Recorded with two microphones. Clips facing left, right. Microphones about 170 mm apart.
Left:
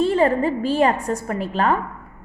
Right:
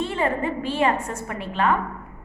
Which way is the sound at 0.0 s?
35° left (ahead or behind).